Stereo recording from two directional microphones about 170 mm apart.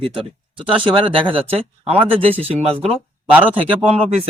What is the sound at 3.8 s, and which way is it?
Speech, 35° right (ahead or behind).